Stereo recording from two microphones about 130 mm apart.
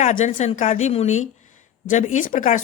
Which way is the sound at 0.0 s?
90° left.